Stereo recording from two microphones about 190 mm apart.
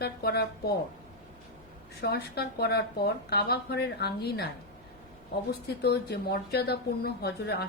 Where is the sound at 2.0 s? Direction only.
60° left (ahead or behind).